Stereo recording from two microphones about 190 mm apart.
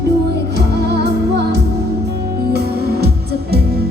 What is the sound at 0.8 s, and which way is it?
Music, 60° right (ahead or behind).